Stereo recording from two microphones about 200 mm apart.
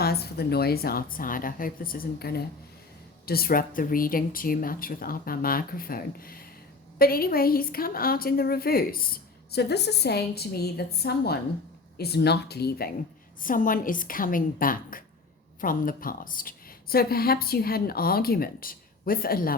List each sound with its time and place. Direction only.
0.0 s a woman's voice: 50° left (ahead or behind)
13.4 s a woman's voice: 45° left (ahead or behind)